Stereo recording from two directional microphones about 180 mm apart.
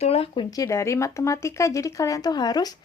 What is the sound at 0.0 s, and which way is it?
Speech, 35° left (ahead or behind).